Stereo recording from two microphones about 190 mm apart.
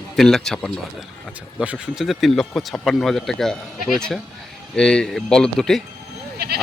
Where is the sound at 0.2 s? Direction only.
Centre (ahead or behind).